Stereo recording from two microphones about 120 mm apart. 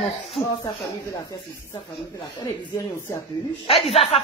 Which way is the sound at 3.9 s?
55° left (ahead or behind).